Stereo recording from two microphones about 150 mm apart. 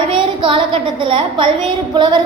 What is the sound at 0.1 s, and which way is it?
A woman's voice, 35° right (ahead or behind).